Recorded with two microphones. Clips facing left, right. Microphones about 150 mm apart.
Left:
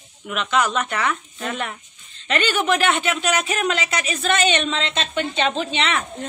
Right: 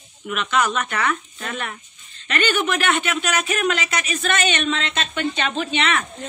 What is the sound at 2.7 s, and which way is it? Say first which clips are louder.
A woman's voice: left 2 dB; 25° left (ahead or behind).